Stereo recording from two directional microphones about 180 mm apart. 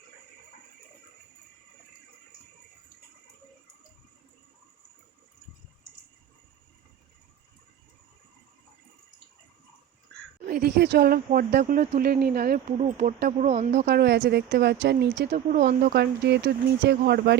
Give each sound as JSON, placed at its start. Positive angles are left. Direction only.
{"t": 10.4, "sound": "a woman's voice", "side_deg": -55}
{"t": 12.7, "sound": "a woman's voice", "side_deg": -40}
{"t": 13.7, "sound": "speech", "side_deg": -65}